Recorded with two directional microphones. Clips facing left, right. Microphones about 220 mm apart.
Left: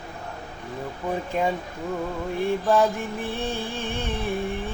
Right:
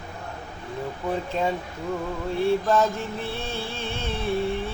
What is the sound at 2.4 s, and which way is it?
Music, 15° left (ahead or behind).